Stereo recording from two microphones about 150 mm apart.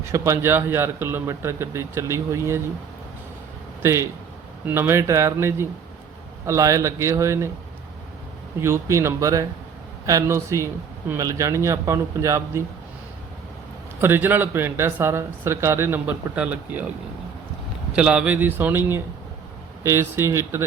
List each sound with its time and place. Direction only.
0.1 s speech: 20° right (ahead or behind)
3.8 s a man's voice: 20° right (ahead or behind)
8.6 s a man's voice: 20° right (ahead or behind)
14.0 s speech: 15° right (ahead or behind)
17.9 s speech: 5° right (ahead or behind)